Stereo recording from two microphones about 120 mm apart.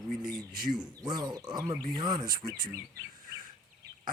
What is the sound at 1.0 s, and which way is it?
Speech, 35° right (ahead or behind).